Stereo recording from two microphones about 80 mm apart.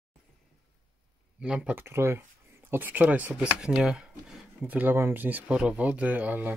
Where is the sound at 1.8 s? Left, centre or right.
Right.